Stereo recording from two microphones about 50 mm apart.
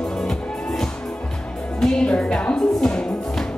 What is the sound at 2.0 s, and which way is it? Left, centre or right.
Music, left.